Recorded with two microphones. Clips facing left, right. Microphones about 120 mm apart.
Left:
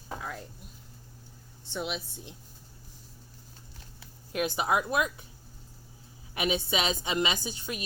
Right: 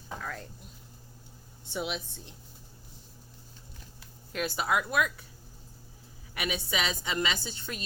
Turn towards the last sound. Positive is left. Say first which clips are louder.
# left 2 dB
turn(degrees=10)  # may be behind; listen again after turning